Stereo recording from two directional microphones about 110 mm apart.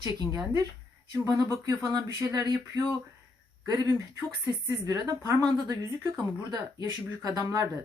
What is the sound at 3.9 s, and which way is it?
Speech, 25° right (ahead or behind).